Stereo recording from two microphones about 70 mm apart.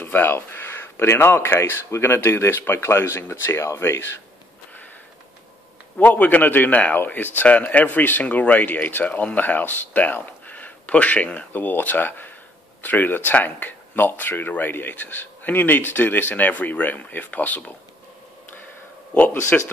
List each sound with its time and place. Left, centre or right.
0.0 s speech: left
5.9 s speech: left
19.1 s speech: centre